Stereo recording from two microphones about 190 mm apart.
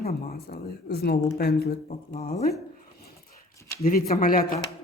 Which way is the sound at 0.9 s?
55° left (ahead or behind).